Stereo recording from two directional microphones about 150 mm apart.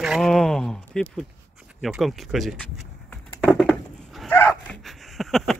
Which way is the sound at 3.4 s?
Centre (ahead or behind).